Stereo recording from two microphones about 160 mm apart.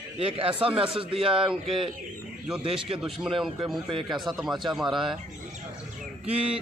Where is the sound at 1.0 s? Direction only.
35° right (ahead or behind).